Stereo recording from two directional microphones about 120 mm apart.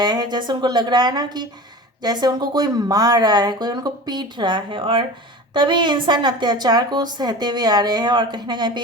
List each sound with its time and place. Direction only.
0.0 s speech: 35° right (ahead or behind)